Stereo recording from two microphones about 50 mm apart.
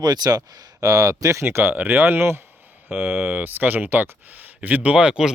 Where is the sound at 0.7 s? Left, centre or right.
Right.